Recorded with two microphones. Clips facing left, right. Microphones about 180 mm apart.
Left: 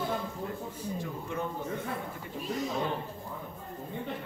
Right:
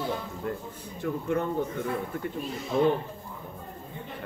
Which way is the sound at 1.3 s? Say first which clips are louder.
Right 8 dB; 60° right (ahead or behind).